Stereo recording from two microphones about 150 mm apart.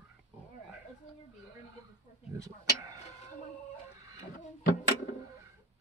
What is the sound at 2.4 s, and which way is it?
Speech, 25° right (ahead or behind).